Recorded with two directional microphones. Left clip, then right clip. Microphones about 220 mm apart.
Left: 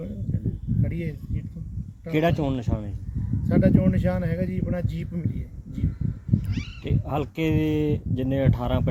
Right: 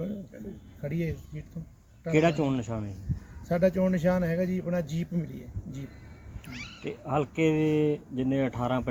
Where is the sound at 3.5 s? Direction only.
Centre (ahead or behind).